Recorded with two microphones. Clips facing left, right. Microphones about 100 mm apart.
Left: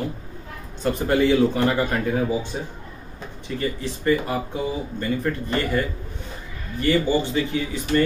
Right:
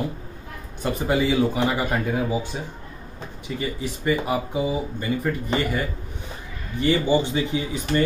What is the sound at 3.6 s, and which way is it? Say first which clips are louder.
Speech: left 2 dB; 15° right (ahead or behind).